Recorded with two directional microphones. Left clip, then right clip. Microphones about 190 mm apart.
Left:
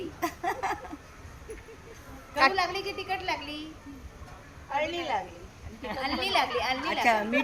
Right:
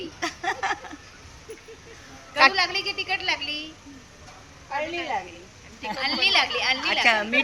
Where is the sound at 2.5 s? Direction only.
15° left (ahead or behind).